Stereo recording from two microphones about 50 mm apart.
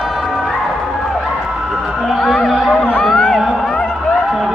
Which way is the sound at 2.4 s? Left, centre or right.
Centre.